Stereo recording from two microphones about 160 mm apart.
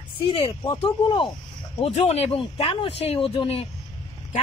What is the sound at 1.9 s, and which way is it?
Speech, 40° left (ahead or behind).